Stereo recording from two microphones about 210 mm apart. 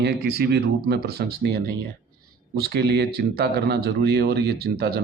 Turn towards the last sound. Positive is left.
turn(degrees=-50)  # may be behind; listen again after turning